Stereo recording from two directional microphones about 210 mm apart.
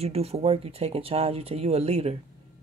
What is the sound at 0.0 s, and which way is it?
Speech, 30° right (ahead or behind).